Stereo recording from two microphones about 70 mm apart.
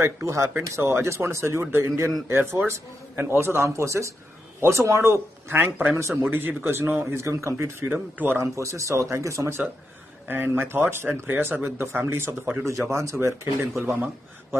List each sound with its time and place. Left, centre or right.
0.0 s speech: right
7.9 s speech: right
8.4 s speech: right
10.2 s speech: right